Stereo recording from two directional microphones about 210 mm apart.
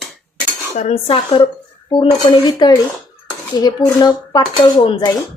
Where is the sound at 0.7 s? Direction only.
30° left (ahead or behind).